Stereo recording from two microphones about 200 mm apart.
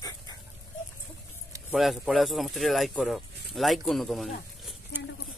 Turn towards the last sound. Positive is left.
turn(degrees=0)  # may be behind; listen again after turning